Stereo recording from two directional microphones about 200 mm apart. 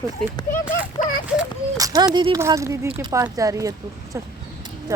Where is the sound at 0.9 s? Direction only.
40° left (ahead or behind).